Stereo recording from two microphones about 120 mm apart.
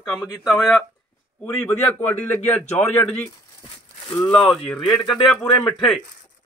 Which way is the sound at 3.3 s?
30° left (ahead or behind).